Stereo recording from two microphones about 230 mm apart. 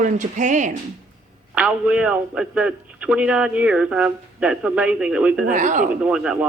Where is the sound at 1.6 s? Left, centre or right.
Centre.